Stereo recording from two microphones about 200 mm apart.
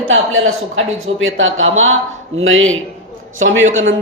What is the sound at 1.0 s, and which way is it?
A man's voice, 75° right (ahead or behind).